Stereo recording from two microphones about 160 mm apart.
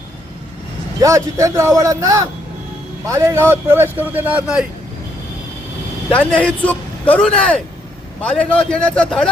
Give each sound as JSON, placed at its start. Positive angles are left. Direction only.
{"t": 1.0, "sound": "a man's voice", "side_deg": -20}
{"t": 6.1, "sound": "a man's voice", "side_deg": 5}